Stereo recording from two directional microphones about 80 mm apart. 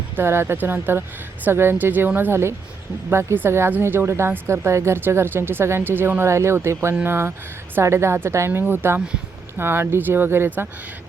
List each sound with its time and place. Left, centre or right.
0.2 s a woman's voice: right